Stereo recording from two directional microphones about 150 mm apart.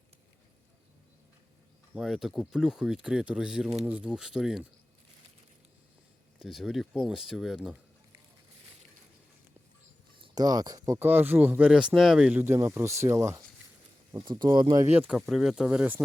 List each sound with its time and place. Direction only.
1.9 s speech: centre (ahead or behind)
6.4 s speech: centre (ahead or behind)
10.2 s speech: 25° right (ahead or behind)
14.1 s speech: 30° right (ahead or behind)
14.8 s speech: 10° right (ahead or behind)